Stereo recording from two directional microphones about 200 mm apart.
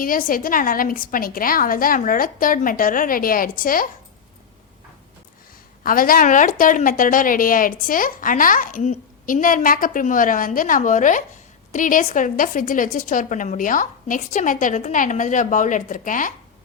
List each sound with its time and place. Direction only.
0.0 s a woman's voice: 45° left (ahead or behind)
5.8 s a woman's voice: 45° left (ahead or behind)